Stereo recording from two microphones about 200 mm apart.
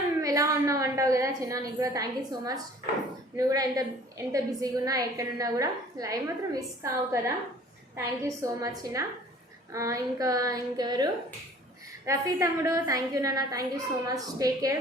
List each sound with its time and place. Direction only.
0.2 s a woman's voice: 15° right (ahead or behind)